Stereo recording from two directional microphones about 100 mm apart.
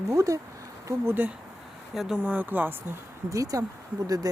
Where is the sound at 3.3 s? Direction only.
35° right (ahead or behind).